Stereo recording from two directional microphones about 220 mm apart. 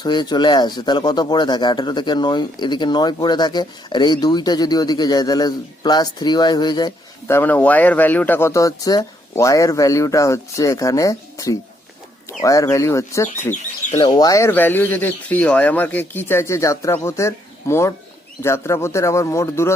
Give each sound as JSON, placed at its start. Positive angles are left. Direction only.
{"t": 0.0, "sound": "speech", "side_deg": 20}